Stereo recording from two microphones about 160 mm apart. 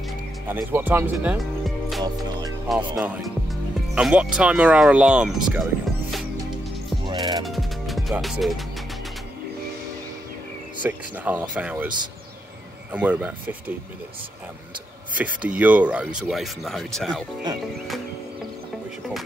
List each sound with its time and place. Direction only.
0.5 s speech: 10° right (ahead or behind)
3.0 s speech: 5° right (ahead or behind)
7.1 s music: 25° right (ahead or behind)
7.4 s music: centre (ahead or behind)
10.8 s speech: 10° right (ahead or behind)
12.9 s speech: 10° right (ahead or behind)
15.1 s speech: 10° right (ahead or behind)
17.5 s music: 25° right (ahead or behind)